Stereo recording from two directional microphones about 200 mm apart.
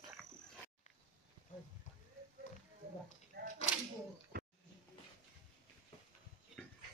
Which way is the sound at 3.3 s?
50° right (ahead or behind).